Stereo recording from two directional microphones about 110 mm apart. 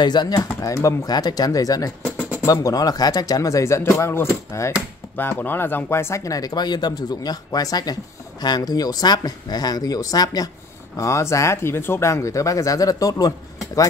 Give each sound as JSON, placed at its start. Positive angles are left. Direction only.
{"t": 0.0, "sound": "speech", "side_deg": 40}